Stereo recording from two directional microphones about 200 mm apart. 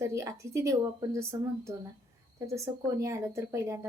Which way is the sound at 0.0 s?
15° right (ahead or behind).